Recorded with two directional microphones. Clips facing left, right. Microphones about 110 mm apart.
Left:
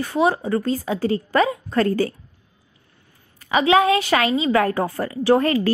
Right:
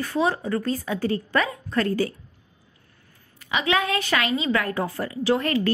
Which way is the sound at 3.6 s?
30° left (ahead or behind).